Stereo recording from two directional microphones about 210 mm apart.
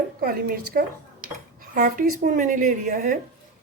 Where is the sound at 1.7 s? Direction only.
40° right (ahead or behind).